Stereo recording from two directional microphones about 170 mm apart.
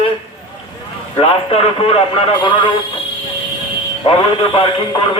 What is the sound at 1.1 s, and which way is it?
A man's voice, 35° left (ahead or behind).